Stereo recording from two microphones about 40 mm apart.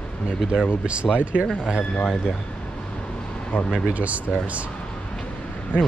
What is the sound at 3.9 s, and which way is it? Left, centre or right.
Speech, right.